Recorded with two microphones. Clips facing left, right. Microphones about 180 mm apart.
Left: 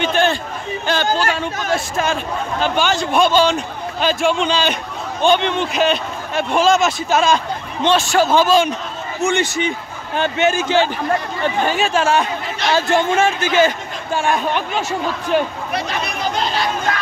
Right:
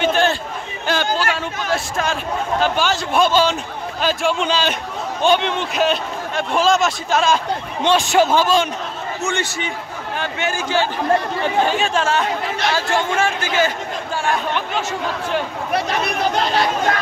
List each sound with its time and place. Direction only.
0.0 s a sound: centre (ahead or behind)
0.8 s speech: 5° right (ahead or behind)
7.8 s a man's voice: 15° right (ahead or behind)
8.4 s speech: 5° left (ahead or behind)
9.2 s a man's voice: 15° left (ahead or behind)
11.6 s a man's voice: 5° left (ahead or behind)